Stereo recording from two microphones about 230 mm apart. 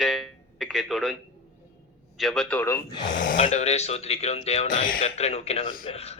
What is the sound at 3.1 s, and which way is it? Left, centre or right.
Speech, left.